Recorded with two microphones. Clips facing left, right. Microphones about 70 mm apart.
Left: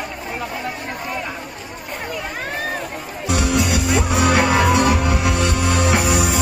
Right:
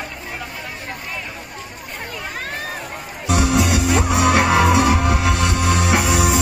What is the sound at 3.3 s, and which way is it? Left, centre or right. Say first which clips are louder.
Music: right 2 dB; centre.